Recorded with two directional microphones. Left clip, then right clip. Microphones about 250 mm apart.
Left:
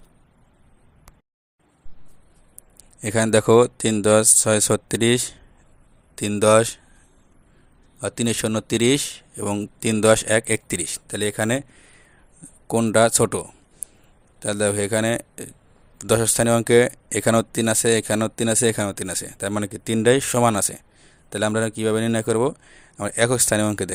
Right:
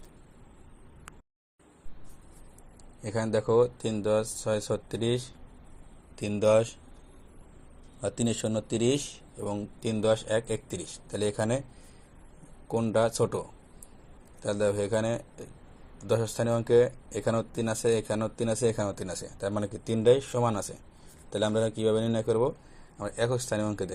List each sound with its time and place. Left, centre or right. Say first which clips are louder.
3.0 s a man's voice: left 10 dB; left
8.4 s speech: left 7 dB; left
8.6 s a man's voice: left 9 dB; left
9.4 s speech: left 8 dB; left
12.6 s speech: left 9 dB; left